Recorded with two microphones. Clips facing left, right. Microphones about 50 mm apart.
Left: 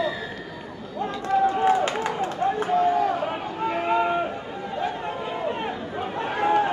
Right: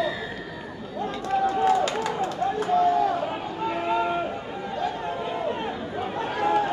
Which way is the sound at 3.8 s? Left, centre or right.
Left.